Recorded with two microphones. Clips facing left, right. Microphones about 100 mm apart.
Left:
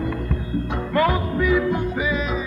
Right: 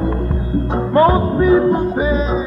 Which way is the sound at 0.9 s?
35° right (ahead or behind).